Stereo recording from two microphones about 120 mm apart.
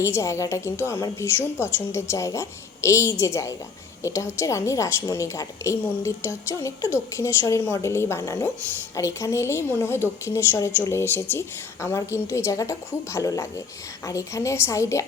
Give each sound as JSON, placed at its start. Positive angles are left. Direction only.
{"t": 0.0, "sound": "a woman's voice", "side_deg": 25}